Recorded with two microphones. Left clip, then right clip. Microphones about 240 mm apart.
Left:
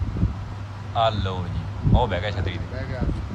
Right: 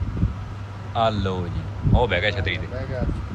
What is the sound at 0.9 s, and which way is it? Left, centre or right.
Speech, centre.